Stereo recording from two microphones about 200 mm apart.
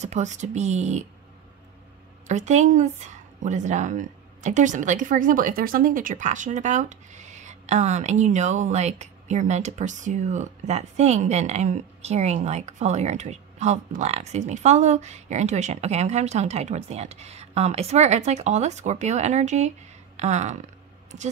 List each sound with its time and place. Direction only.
0.0 s a woman's voice: 35° right (ahead or behind)
2.2 s a woman's voice: 35° right (ahead or behind)